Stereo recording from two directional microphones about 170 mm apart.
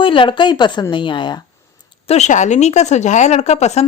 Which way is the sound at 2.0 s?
40° left (ahead or behind).